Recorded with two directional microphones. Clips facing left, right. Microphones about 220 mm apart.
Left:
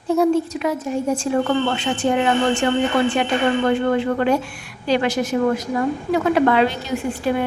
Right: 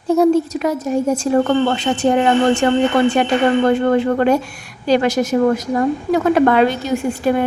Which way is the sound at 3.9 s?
45° right (ahead or behind).